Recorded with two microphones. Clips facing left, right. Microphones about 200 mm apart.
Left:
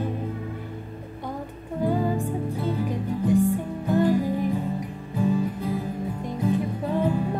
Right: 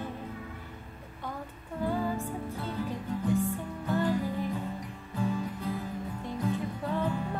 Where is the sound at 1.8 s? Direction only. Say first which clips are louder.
Left 6 dB; 15° left (ahead or behind).